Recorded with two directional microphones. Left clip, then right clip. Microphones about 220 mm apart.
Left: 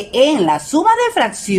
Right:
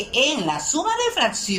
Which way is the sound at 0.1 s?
35° left (ahead or behind).